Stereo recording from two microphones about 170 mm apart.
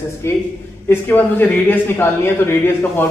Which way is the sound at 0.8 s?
10° left (ahead or behind).